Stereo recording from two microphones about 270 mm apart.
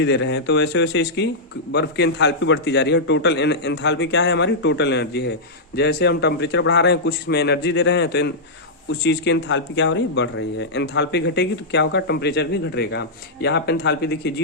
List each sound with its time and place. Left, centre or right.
0.0 s speech: left